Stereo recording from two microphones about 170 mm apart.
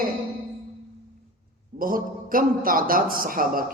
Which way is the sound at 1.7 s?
55° right (ahead or behind).